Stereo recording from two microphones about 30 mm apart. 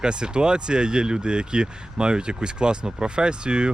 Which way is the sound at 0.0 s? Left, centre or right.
Right.